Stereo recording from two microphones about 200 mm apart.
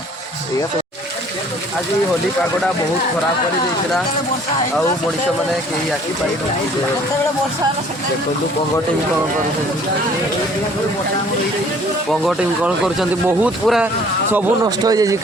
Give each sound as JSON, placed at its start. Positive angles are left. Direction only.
{"t": 12.2, "sound": "speech", "side_deg": 0}
{"t": 14.3, "sound": "speech", "side_deg": -15}